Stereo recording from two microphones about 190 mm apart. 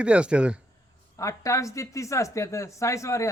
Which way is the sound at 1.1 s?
15° left (ahead or behind).